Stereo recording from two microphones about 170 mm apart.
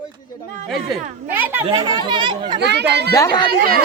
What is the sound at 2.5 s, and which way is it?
Speech, 80° right.